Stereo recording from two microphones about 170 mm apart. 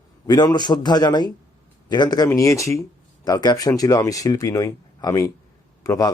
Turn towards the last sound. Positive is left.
turn(degrees=20)  # may be behind; listen again after turning